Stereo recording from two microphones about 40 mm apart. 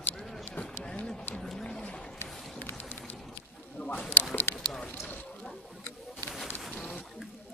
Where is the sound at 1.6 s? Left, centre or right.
Left.